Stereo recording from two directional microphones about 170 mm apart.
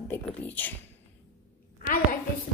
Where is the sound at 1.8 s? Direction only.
55° left (ahead or behind).